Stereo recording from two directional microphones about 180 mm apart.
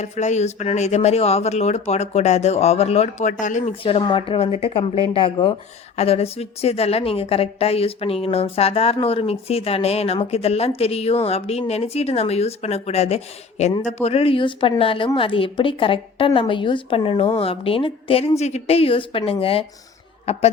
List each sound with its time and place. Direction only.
0.0 s a woman's voice: 40° left (ahead or behind)
3.8 s a woman's voice: 30° left (ahead or behind)